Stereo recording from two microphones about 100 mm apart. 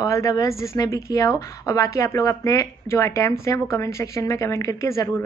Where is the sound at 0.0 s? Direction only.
35° left (ahead or behind).